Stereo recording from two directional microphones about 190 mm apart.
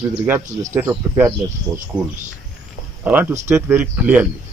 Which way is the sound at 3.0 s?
10° right (ahead or behind).